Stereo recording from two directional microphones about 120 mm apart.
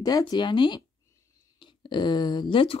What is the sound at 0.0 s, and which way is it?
A woman's voice, 35° left (ahead or behind).